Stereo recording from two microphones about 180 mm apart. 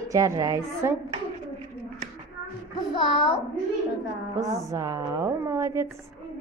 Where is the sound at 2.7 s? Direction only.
30° left (ahead or behind).